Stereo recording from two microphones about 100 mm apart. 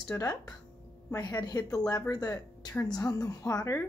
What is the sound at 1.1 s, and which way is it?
A woman's voice, 40° left (ahead or behind).